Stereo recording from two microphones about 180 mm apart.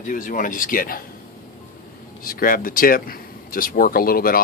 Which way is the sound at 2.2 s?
55° left (ahead or behind).